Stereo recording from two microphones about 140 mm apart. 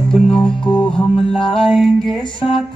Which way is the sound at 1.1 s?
40° left (ahead or behind).